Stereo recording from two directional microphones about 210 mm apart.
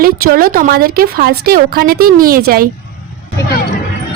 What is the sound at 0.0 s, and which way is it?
A woman's voice, 45° right (ahead or behind).